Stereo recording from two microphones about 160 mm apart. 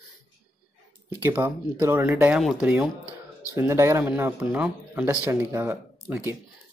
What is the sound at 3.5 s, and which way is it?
Speech, 15° right (ahead or behind).